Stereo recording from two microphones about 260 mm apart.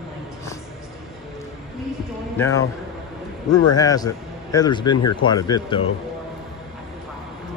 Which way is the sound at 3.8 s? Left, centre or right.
Centre.